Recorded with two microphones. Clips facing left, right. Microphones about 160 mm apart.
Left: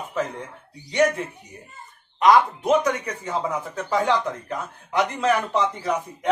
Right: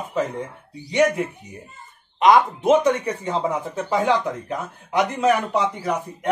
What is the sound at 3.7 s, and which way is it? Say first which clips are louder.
Speech: right 1 dB; 15° right (ahead or behind).